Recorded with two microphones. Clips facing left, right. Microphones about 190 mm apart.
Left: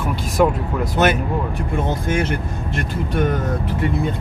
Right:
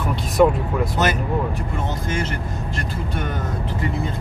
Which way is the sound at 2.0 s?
60° left (ahead or behind).